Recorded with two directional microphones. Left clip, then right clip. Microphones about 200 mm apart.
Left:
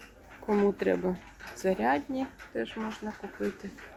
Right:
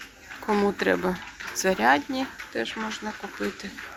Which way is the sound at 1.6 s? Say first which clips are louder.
Right 6 dB; 5° left (ahead or behind).